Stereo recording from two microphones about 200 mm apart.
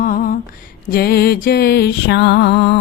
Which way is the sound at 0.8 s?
50° left (ahead or behind).